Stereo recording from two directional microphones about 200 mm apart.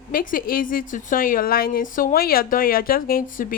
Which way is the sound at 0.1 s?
45° left (ahead or behind).